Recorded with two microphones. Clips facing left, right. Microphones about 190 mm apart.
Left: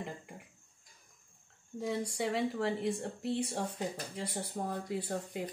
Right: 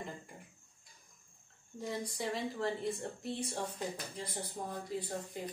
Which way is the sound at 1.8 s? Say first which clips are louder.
Left 4 dB; 65° left (ahead or behind).